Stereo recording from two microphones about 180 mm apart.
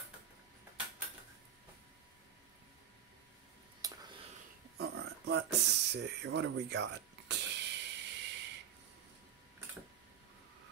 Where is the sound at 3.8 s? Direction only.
20° right (ahead or behind).